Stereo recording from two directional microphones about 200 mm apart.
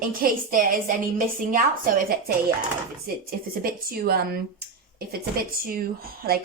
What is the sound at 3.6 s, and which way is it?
Speech, 50° right (ahead or behind).